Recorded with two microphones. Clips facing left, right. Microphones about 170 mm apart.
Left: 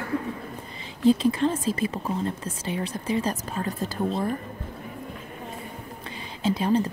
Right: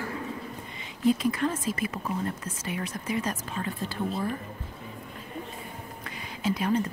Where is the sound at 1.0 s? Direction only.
30° left (ahead or behind).